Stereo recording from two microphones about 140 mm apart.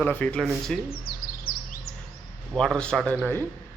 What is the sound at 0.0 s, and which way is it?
Speech, 10° left (ahead or behind).